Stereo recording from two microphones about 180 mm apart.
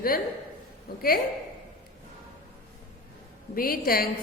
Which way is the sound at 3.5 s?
55° left (ahead or behind).